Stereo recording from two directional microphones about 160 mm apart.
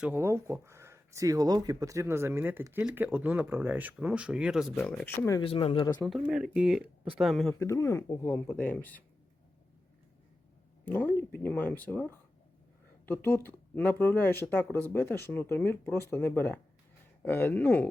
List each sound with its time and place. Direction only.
0.0 s speech: 15° right (ahead or behind); by 5.4 s 15° left (ahead or behind)
5.4 s speech: 35° left (ahead or behind)
6.1 s speech: 5° right (ahead or behind)
7.6 s speech: 20° left (ahead or behind)
10.8 s speech: 10° left (ahead or behind)